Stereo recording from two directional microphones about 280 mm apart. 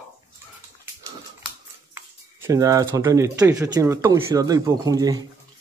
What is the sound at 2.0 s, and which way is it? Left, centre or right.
Speech, centre.